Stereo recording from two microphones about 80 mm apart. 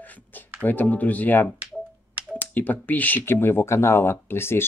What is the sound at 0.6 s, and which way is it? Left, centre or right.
Speech, left.